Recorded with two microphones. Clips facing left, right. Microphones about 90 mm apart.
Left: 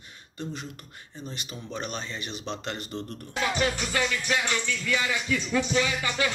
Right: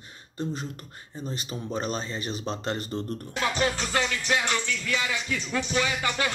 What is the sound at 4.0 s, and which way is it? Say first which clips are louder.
Music: right 1 dB; 20° right (ahead or behind).